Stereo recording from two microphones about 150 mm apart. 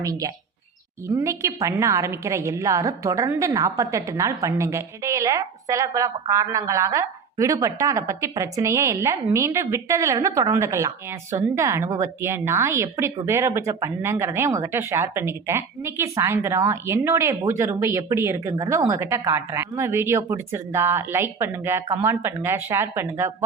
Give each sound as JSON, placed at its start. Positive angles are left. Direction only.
{"t": 0.0, "sound": "a woman's voice", "side_deg": -25}